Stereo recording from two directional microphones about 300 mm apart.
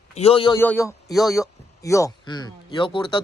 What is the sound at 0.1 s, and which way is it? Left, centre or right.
Speech, centre.